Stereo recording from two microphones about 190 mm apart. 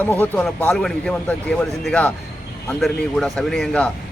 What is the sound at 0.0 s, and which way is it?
Speech, 10° left (ahead or behind).